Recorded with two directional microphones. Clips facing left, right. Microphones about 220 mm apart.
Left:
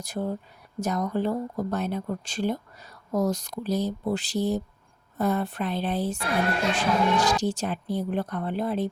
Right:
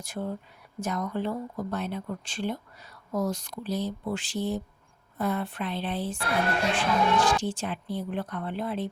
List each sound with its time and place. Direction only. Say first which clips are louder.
0.0 s speech: left 4 dB; 40° left (ahead or behind)